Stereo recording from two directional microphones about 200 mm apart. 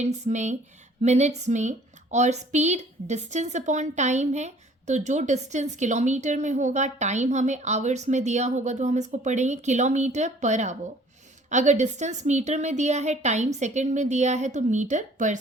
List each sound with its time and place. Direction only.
0.0 s a woman's voice: 35° right (ahead or behind)